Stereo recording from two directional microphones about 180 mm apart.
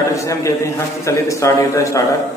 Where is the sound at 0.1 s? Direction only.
15° left (ahead or behind).